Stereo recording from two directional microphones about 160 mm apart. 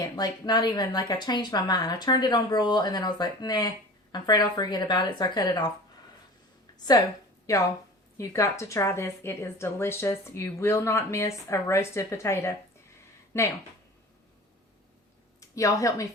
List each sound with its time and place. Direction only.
0.0 s speech: 25° left (ahead or behind)
7.5 s a woman's voice: 20° left (ahead or behind)
15.4 s speech: 20° left (ahead or behind)